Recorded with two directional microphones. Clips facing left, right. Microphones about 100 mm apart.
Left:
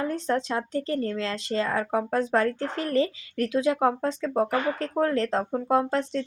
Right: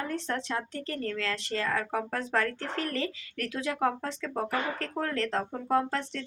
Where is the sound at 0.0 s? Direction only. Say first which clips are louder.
Left 6 dB; 20° left (ahead or behind).